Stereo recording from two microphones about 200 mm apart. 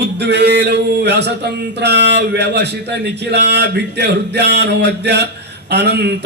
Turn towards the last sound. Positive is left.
turn(degrees=-55)  # may be behind; listen again after turning